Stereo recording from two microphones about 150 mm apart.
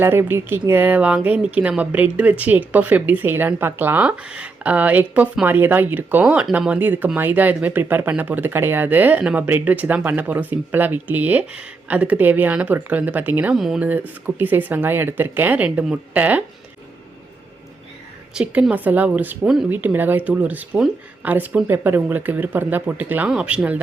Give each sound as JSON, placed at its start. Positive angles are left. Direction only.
{"t": 0.0, "sound": "speech", "side_deg": -15}
{"t": 18.3, "sound": "speech", "side_deg": -5}